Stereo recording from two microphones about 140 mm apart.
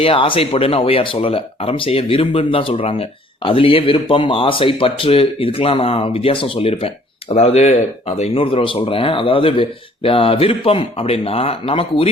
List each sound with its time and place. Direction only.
0.0 s speech: 40° left (ahead or behind)